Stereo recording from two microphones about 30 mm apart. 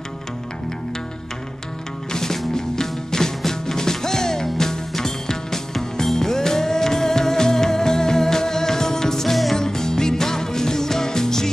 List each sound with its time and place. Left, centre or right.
2.1 s music: centre